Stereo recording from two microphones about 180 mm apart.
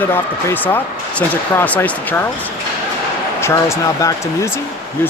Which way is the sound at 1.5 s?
10° left (ahead or behind).